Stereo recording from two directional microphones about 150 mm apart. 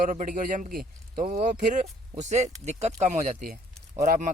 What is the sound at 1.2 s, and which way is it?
Speech, 55° right (ahead or behind).